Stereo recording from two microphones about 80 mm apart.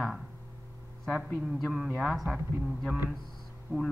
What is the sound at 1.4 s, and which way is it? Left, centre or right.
Speech, centre.